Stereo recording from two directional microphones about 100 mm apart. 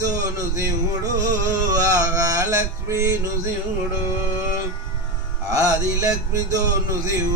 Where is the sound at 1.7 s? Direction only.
35° right (ahead or behind).